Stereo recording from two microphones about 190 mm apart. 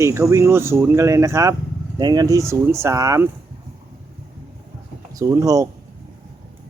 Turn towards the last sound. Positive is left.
turn(degrees=-15)  # may be behind; listen again after turning